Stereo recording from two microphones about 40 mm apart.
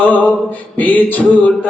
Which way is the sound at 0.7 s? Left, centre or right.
Left.